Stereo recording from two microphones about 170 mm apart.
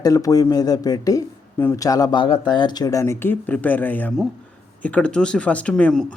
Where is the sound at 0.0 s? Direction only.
20° left (ahead or behind).